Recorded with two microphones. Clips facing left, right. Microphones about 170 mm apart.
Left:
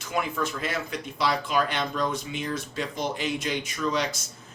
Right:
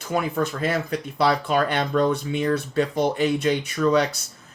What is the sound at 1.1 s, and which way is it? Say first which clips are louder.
Speech: right 5 dB; 60° right (ahead or behind).